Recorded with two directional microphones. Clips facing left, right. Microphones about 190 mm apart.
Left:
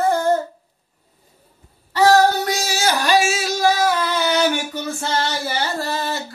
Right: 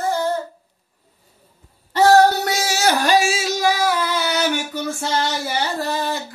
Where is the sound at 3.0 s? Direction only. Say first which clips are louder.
Left 1 dB; 45° right (ahead or behind).